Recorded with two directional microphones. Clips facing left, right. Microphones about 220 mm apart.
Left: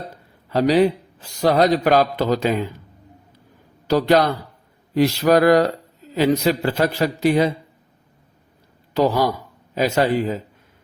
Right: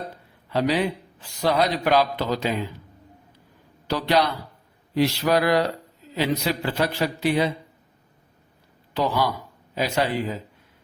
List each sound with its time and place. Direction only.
0.5 s a man's voice: 40° left (ahead or behind)
3.8 s a man's voice: 45° left (ahead or behind)
8.9 s a man's voice: 40° left (ahead or behind)